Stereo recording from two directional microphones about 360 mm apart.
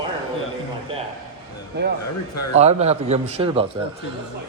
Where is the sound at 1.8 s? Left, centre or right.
Right.